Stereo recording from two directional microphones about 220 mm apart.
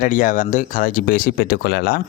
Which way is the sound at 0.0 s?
35° left (ahead or behind).